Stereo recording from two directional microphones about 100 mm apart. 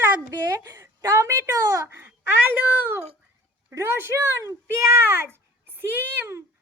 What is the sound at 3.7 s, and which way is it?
A child's voice, 25° right (ahead or behind).